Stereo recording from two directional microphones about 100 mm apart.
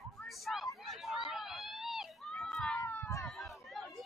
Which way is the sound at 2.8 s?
25° left (ahead or behind).